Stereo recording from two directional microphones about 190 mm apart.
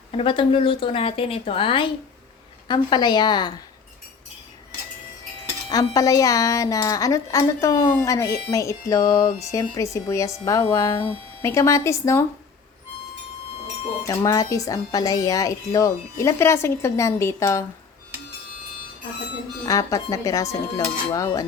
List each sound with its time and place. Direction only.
0.1 s a woman's voice: 30° left (ahead or behind)
5.6 s speech: 20° left (ahead or behind)
14.1 s speech: 15° left (ahead or behind)
19.6 s speech: 20° left (ahead or behind)